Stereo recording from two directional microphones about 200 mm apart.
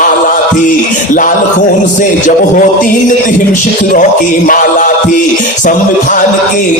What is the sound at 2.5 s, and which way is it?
Speech, 40° left (ahead or behind).